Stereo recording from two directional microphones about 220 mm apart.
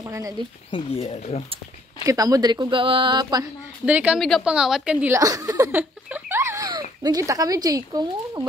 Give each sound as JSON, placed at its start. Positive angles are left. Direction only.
{"t": 0.1, "sound": "speech", "side_deg": -15}
{"t": 0.7, "sound": "speech", "side_deg": 20}
{"t": 2.0, "sound": "speech", "side_deg": -15}
{"t": 3.8, "sound": "a woman's voice", "side_deg": -5}